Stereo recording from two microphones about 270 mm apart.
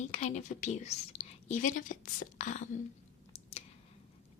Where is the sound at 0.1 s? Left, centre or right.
Left.